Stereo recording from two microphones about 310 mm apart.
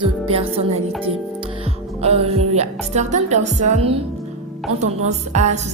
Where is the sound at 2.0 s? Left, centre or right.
Centre.